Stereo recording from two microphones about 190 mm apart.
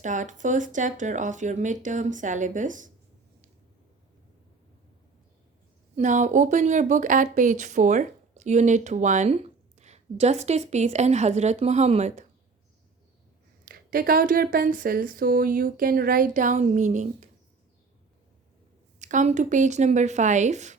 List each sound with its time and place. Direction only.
0.0 s speech: 40° right (ahead or behind)
6.0 s speech: 40° right (ahead or behind)
13.7 s speech: 50° right (ahead or behind)
18.9 s speech: 40° right (ahead or behind)